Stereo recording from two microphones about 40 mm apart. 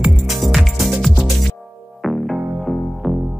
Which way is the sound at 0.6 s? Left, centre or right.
Centre.